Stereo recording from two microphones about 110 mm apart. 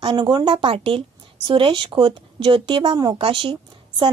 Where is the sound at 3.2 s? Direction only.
55° right (ahead or behind).